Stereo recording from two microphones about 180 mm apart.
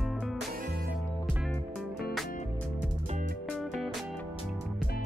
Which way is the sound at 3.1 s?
45° right (ahead or behind).